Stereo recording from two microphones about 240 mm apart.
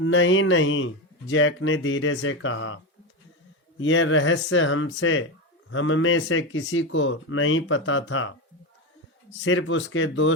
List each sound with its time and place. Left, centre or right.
0.0 s speech: left
9.4 s speech: left